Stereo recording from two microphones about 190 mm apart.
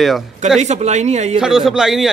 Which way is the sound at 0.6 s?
35° right (ahead or behind).